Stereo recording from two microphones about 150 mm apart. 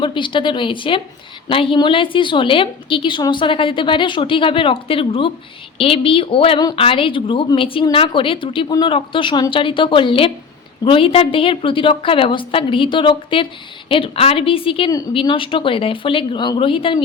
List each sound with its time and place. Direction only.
0.0 s speech: 35° left (ahead or behind)